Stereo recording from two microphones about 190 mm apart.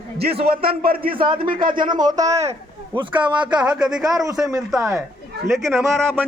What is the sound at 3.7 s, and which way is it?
Speech, 5° right (ahead or behind).